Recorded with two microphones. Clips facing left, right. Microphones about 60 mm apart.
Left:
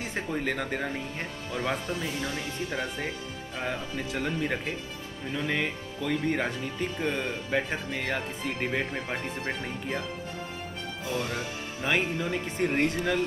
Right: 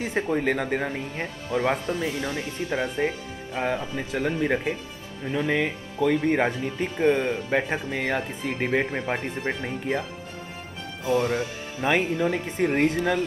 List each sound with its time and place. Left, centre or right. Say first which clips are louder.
0.0 s speech: right 6 dB; right
11.1 s speech: right 9 dB; right